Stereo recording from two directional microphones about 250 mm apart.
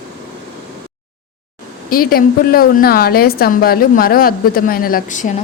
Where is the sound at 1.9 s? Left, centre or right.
Left.